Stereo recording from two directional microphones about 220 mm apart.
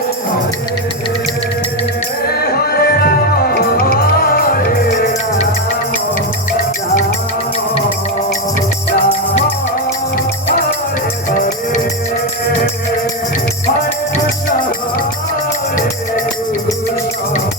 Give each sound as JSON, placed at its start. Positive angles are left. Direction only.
{"t": 2.2, "sound": "music", "side_deg": 45}
{"t": 11.3, "sound": "music", "side_deg": 35}